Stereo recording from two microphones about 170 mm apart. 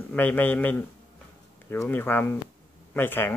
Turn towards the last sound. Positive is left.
turn(degrees=10)  # may be behind; listen again after turning